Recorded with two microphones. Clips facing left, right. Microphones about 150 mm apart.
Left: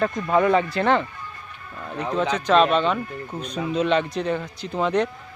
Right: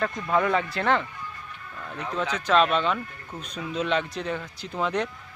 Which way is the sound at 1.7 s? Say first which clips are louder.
Left 5 dB; 15° left (ahead or behind).